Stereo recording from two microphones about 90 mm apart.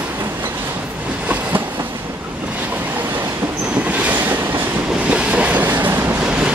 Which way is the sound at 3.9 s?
15° right (ahead or behind).